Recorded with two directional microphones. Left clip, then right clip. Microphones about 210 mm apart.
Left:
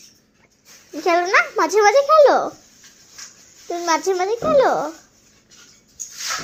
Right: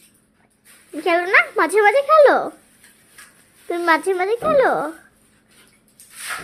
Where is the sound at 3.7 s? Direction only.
25° right (ahead or behind).